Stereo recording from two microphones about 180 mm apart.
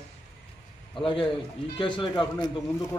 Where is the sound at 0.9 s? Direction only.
30° left (ahead or behind).